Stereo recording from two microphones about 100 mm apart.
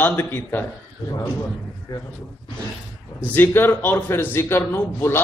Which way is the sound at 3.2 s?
20° left (ahead or behind).